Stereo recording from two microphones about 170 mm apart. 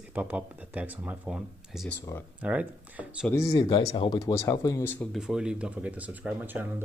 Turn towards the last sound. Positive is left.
turn(degrees=-10)  # may be behind; listen again after turning